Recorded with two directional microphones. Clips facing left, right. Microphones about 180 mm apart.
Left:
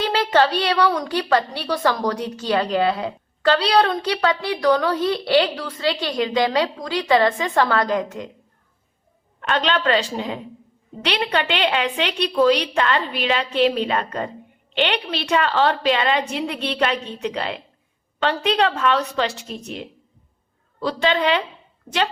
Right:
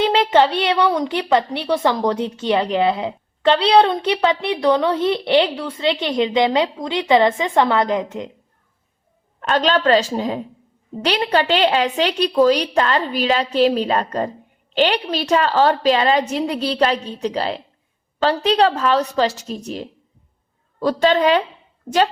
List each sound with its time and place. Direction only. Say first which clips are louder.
0.0 s a woman's voice: right 3 dB; 20° right (ahead or behind)
9.4 s a woman's voice: right 4 dB; 40° right (ahead or behind)